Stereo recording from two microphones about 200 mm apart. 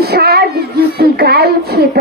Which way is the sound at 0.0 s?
50° right (ahead or behind).